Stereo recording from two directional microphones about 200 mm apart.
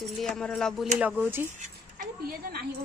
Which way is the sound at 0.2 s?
5° left (ahead or behind).